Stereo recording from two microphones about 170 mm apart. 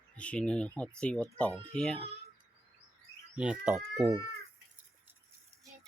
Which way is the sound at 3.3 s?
5° right (ahead or behind).